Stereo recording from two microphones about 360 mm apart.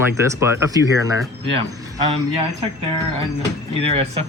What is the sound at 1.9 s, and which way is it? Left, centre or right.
Speech, centre.